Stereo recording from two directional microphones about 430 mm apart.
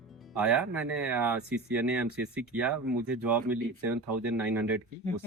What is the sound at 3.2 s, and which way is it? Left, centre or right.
Speech, right.